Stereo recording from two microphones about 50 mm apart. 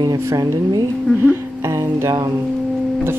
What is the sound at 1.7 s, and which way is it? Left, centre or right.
Music, right.